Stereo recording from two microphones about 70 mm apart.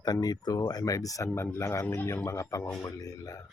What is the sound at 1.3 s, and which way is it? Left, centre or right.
A man's voice, left.